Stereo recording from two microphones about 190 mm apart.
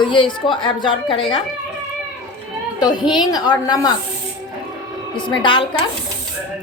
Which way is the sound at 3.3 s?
20° left (ahead or behind).